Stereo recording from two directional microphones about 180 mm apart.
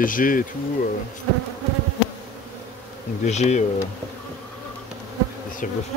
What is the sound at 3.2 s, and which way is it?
Bee, 40° left (ahead or behind).